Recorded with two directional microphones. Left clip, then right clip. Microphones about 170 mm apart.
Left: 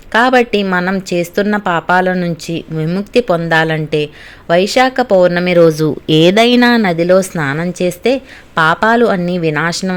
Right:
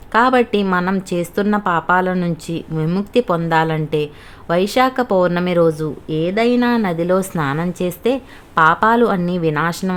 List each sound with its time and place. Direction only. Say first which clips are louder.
0.1 s a woman's voice: left 4 dB; 5° left (ahead or behind)
5.5 s speech: left 7 dB; 25° left (ahead or behind)
6.7 s a woman's voice: left 7 dB; 15° left (ahead or behind)